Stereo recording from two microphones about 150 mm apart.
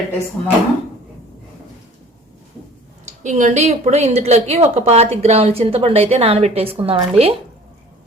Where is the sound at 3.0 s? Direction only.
50° right (ahead or behind).